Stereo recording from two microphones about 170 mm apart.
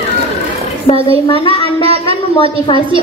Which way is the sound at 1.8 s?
35° right (ahead or behind).